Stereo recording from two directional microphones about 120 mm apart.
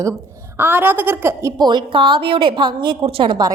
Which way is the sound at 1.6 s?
40° right (ahead or behind).